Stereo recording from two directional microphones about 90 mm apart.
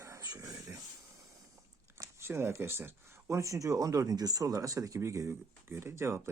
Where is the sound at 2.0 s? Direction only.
30° right (ahead or behind).